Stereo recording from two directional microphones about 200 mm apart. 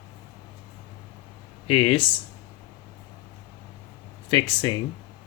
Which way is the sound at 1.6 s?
25° left (ahead or behind).